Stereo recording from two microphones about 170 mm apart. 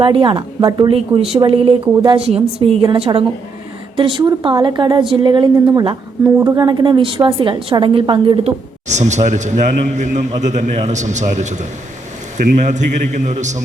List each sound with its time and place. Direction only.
0.0 s a woman's voice: 30° right (ahead or behind)
8.9 s a man's voice: 45° right (ahead or behind)